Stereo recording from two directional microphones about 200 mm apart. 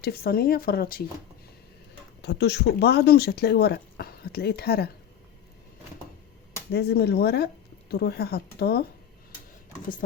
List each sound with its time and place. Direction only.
0.0 s speech: 50° left (ahead or behind)
2.2 s speech: 55° left (ahead or behind)
6.7 s speech: 55° left (ahead or behind)